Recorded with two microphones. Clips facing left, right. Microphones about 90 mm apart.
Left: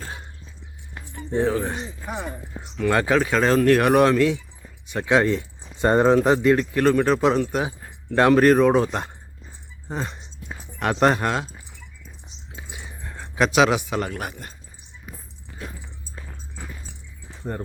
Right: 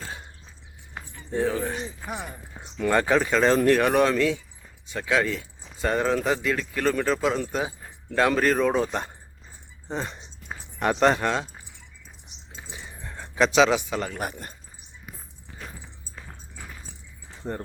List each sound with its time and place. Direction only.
1.5 s a man's voice: 5° left (ahead or behind)
1.7 s speech: 25° left (ahead or behind)
2.9 s a man's voice: centre (ahead or behind)
12.6 s keys jangling: 5° left (ahead or behind)
14.1 s speech: centre (ahead or behind)
17.4 s speech: centre (ahead or behind)